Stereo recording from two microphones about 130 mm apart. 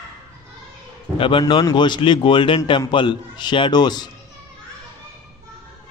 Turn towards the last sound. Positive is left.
turn(degrees=35)  # may be behind; listen again after turning